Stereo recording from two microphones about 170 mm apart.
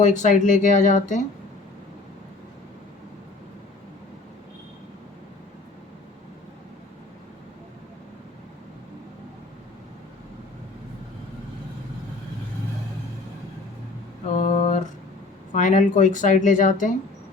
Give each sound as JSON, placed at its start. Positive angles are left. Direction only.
{"t": 0.0, "sound": "speech", "side_deg": 45}
{"t": 14.3, "sound": "a sound", "side_deg": 40}
{"t": 15.5, "sound": "speech", "side_deg": 45}